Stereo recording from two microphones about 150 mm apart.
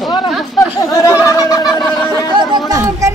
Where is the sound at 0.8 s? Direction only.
20° left (ahead or behind).